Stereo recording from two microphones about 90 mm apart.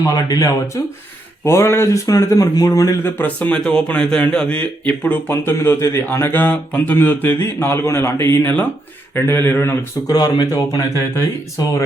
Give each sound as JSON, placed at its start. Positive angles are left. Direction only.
{"t": 0.0, "sound": "speech", "side_deg": 40}
{"t": 1.5, "sound": "speech", "side_deg": 30}
{"t": 3.0, "sound": "a man's voice", "side_deg": 20}
{"t": 5.3, "sound": "speech", "side_deg": 25}
{"t": 10.1, "sound": "speech", "side_deg": 45}